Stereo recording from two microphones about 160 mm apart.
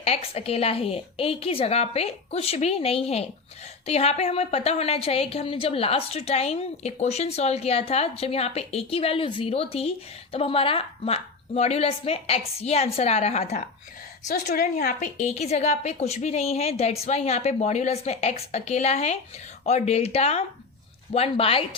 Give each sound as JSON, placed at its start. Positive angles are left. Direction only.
{"t": 0.0, "sound": "a woman's voice", "side_deg": 40}
{"t": 14.4, "sound": "a woman's voice", "side_deg": 65}